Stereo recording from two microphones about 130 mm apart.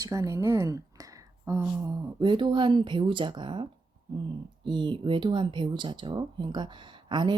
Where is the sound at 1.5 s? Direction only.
20° right (ahead or behind).